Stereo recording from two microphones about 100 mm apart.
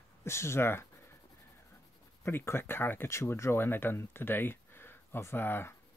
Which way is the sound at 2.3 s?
25° left (ahead or behind).